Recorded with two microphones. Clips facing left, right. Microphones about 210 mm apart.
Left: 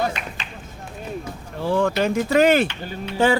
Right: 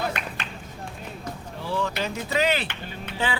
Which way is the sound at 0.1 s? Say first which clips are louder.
Even; 55° right (ahead or behind).